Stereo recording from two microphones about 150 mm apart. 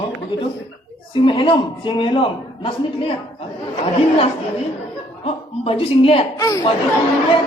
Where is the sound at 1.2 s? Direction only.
35° left (ahead or behind).